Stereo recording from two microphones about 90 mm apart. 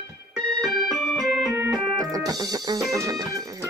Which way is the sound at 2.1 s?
45° right (ahead or behind).